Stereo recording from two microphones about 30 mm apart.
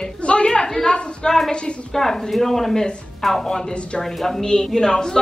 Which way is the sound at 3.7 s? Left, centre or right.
Left.